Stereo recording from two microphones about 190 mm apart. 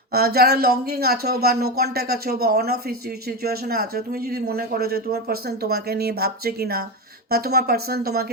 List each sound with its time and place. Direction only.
0.1 s speech: 55° right (ahead or behind)